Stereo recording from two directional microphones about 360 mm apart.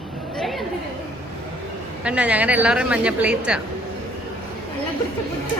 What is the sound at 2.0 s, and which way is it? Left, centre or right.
A woman's voice, centre.